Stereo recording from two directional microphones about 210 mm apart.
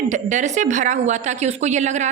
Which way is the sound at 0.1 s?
35° right (ahead or behind).